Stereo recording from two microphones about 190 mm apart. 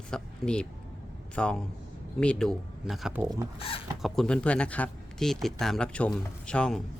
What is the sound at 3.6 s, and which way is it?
Speech, 30° left (ahead or behind).